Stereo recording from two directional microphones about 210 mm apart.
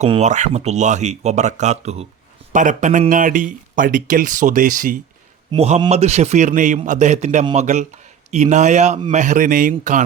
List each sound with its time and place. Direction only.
0.0 s speech: 30° right (ahead or behind)
5.5 s a man's voice: 30° right (ahead or behind)